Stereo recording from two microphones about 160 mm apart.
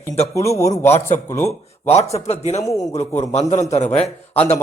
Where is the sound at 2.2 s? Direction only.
45° left (ahead or behind).